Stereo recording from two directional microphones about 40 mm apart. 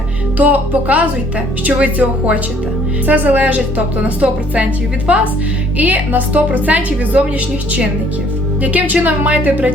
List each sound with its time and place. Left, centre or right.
0.3 s a woman's voice: right
5.1 s a woman's voice: right